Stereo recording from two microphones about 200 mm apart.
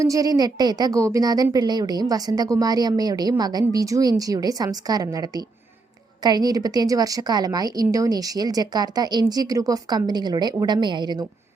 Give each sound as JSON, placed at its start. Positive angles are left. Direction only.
{"t": 0.0, "sound": "speech", "side_deg": -15}